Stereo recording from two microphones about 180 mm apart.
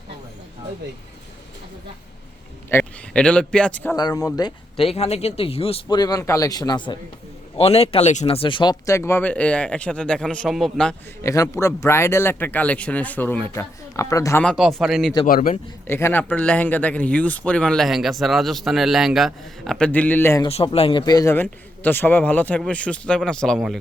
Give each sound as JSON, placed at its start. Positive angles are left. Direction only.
{"t": 2.6, "sound": "speech", "side_deg": 10}
{"t": 3.9, "sound": "speech", "side_deg": 20}
{"t": 11.2, "sound": "speech", "side_deg": 15}
{"t": 14.4, "sound": "speech", "side_deg": 0}
{"t": 15.3, "sound": "a man's voice", "side_deg": 50}
{"t": 15.9, "sound": "speech", "side_deg": 15}
{"t": 20.4, "sound": "speech", "side_deg": 35}